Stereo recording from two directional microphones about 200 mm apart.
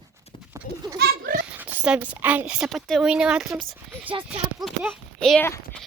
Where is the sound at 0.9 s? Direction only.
50° right (ahead or behind).